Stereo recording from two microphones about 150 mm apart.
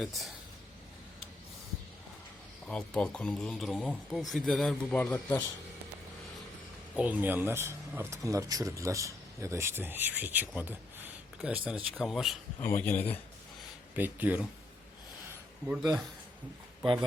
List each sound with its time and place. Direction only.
0.0 s speech: centre (ahead or behind)
2.6 s speech: 5° left (ahead or behind)
6.9 s speech: 10° right (ahead or behind)
12.5 s speech: 15° left (ahead or behind)
13.9 s speech: 10° right (ahead or behind)
15.3 s a sound: 10° right (ahead or behind)